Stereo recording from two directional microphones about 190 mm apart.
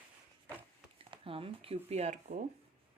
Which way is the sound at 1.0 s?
30° right (ahead or behind).